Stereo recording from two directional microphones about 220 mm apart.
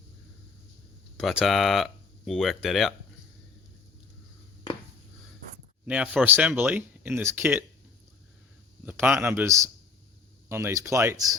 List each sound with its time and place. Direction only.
1.1 s speech: centre (ahead or behind)
5.8 s speech: 5° right (ahead or behind)
8.9 s speech: 10° right (ahead or behind)